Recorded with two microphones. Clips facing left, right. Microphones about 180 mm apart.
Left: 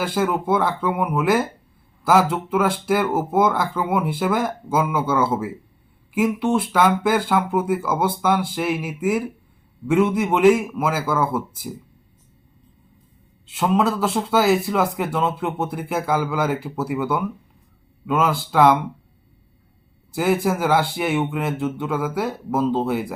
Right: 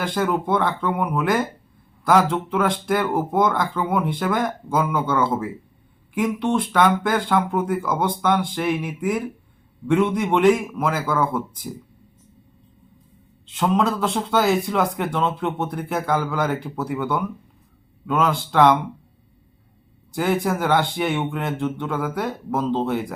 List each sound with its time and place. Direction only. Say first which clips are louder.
0.0 s a man's voice: left 1 dB; 5° left (ahead or behind)
13.5 s a man's voice: left 1 dB; 5° left (ahead or behind)
20.1 s a man's voice: left 2 dB; 5° left (ahead or behind)